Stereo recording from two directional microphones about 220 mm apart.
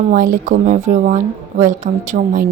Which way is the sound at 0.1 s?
40° right (ahead or behind).